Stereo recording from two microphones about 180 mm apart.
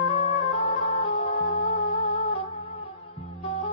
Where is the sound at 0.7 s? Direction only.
35° left (ahead or behind).